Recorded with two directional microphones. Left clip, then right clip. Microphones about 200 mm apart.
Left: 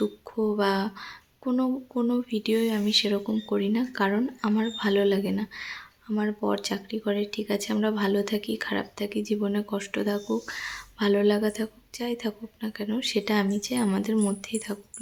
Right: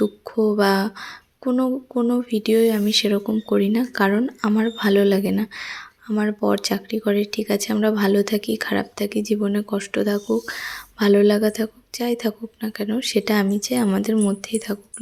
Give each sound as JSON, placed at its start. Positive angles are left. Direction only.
{"t": 0.0, "sound": "speech", "side_deg": -25}